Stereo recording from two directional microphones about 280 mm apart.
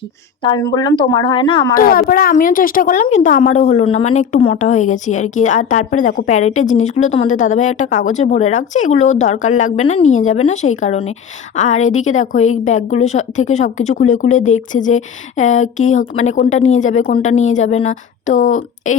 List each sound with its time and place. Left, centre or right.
0.4 s speech: centre
1.7 s a woman's voice: left